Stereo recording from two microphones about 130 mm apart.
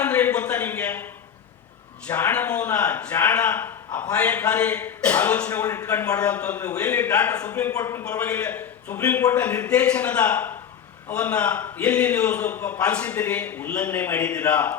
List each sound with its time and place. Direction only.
0.0 s a sound: 15° left (ahead or behind)
2.0 s a man's voice: 10° left (ahead or behind)
7.7 s a man's voice: 25° left (ahead or behind)
8.0 s a man's voice: 10° left (ahead or behind)